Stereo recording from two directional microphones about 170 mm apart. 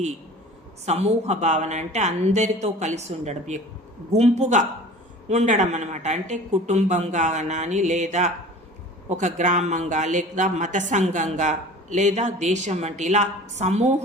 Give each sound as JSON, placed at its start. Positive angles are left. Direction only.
{"t": 0.9, "sound": "speech", "side_deg": -40}